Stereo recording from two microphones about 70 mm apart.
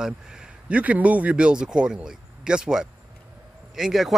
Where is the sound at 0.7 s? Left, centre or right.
Right.